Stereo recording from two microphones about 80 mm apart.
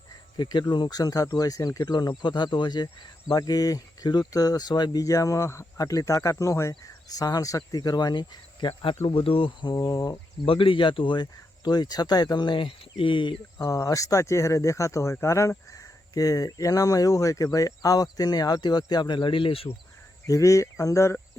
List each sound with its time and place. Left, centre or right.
0.3 s speech: left
1.9 s speech: left
5.0 s speech: left
5.8 s speech: left
9.7 s speech: left
10.6 s speech: left
13.7 s speech: left
20.2 s speech: left